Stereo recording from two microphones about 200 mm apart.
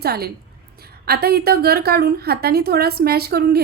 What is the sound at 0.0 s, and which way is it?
A woman's voice, 50° right (ahead or behind).